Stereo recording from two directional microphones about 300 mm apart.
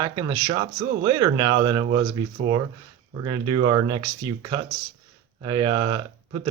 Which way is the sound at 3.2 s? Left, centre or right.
Centre.